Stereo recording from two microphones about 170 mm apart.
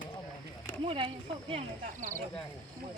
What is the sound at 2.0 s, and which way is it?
Speech, 50° right (ahead or behind).